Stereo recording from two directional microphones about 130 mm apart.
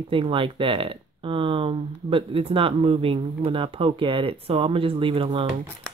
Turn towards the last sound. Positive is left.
turn(degrees=-40)  # may be behind; listen again after turning